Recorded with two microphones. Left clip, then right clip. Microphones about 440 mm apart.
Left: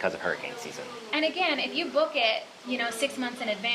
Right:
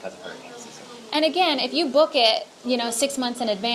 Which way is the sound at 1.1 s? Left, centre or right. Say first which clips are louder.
Right 6 dB; right.